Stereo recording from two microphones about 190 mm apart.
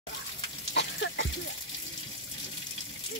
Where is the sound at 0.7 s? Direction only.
65° left (ahead or behind).